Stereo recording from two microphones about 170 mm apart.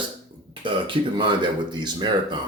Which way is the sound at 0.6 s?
30° right (ahead or behind).